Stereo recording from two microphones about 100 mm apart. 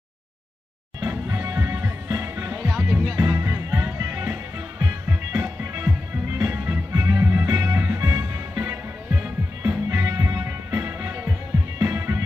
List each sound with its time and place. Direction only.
1.1 s music: 30° right (ahead or behind)
2.6 s music: 10° right (ahead or behind)
3.1 s music: 25° right (ahead or behind)
5.3 s music: 15° right (ahead or behind)
9.8 s music: 25° right (ahead or behind)